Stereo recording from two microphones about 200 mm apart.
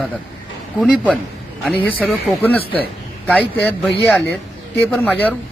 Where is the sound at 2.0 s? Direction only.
5° left (ahead or behind).